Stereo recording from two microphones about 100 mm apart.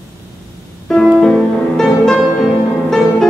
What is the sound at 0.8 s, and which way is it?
Music, 5° left (ahead or behind).